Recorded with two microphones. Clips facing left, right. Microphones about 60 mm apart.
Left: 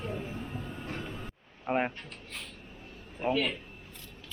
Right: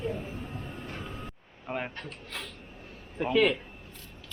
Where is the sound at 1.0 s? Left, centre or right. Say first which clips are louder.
Even; centre.